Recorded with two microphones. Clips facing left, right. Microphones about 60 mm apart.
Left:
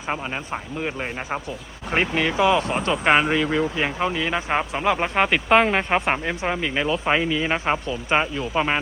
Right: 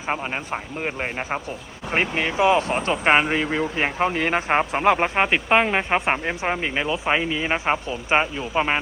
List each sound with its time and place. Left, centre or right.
0.0 s speech: centre
0.8 s speech: right
4.1 s speech: right
5.1 s speech: centre
6.7 s speech: centre